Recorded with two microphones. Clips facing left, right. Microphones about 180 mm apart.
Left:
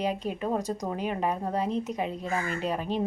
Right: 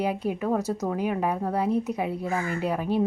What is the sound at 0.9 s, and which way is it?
A woman's voice, 10° right (ahead or behind).